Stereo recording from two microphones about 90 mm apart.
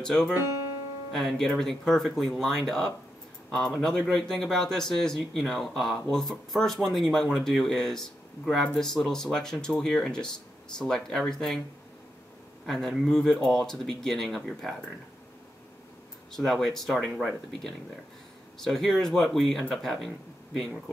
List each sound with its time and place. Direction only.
0.0 s speech: 10° left (ahead or behind)
0.3 s speech: 30° right (ahead or behind)
1.1 s speech: 5° left (ahead or behind)
4.0 s speech: 10° left (ahead or behind)
12.6 s speech: 5° left (ahead or behind)
16.3 s speech: 5° left (ahead or behind)
18.6 s speech: 5° left (ahead or behind)